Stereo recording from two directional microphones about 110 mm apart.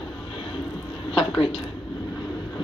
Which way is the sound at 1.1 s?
55° left (ahead or behind).